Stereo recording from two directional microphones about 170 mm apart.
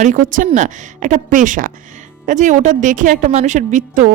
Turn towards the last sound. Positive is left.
turn(degrees=-50)  # may be behind; listen again after turning